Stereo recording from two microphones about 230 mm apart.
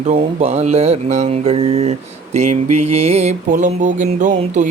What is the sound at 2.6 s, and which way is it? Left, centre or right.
Music, right.